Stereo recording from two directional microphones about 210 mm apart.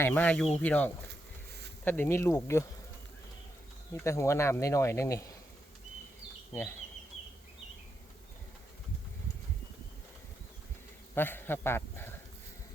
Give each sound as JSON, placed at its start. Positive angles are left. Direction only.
{"t": 0.0, "sound": "speech", "side_deg": 10}
{"t": 3.9, "sound": "speech", "side_deg": 15}
{"t": 6.5, "sound": "bee", "side_deg": 10}
{"t": 11.1, "sound": "a man's voice", "side_deg": 10}